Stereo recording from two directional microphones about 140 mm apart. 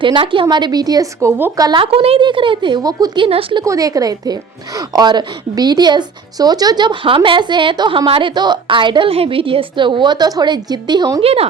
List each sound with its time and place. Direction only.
0.0 s speech: 35° right (ahead or behind)
1.8 s a woman's voice: 40° right (ahead or behind)
3.2 s a woman's voice: 40° right (ahead or behind)
3.6 s a woman's voice: 25° right (ahead or behind)
11.2 s a woman's voice: 45° right (ahead or behind)